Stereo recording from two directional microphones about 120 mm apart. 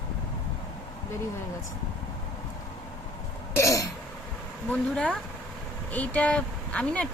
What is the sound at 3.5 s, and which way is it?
Throat clearing, 25° left (ahead or behind).